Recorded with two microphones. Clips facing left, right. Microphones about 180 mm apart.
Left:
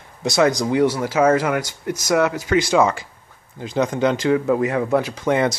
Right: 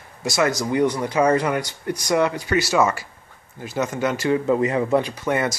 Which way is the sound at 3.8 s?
15° left (ahead or behind).